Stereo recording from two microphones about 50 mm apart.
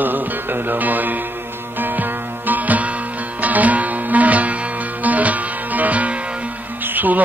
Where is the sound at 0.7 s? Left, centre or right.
Right.